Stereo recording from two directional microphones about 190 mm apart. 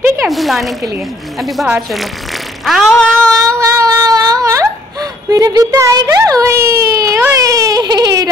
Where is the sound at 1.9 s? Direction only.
Centre (ahead or behind).